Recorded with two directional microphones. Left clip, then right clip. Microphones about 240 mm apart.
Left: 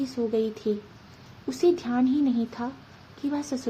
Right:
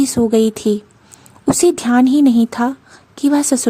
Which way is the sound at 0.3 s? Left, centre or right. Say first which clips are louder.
Right 12 dB; right.